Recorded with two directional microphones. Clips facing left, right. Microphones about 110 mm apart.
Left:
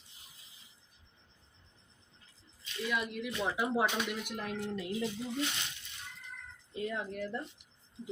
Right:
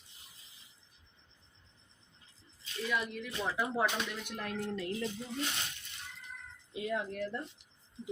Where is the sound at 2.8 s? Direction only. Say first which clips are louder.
Left 1 dB; 5° left (ahead or behind).